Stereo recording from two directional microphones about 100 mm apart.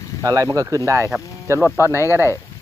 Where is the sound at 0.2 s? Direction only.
35° right (ahead or behind).